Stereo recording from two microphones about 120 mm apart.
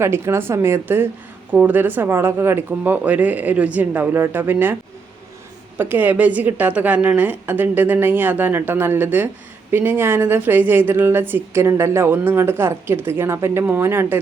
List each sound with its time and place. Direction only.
0.0 s a woman's voice: 20° right (ahead or behind)